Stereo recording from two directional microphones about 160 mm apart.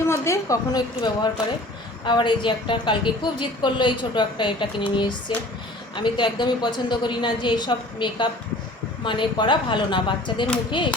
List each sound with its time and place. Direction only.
0.1 s a woman's voice: 20° left (ahead or behind)